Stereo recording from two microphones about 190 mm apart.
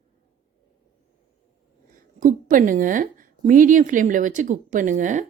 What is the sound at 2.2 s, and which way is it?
A woman's voice, 40° right (ahead or behind).